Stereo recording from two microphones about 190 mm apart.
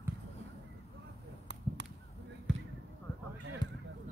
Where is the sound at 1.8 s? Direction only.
65° right (ahead or behind).